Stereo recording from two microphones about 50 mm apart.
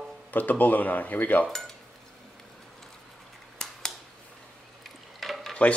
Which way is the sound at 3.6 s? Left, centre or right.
Centre.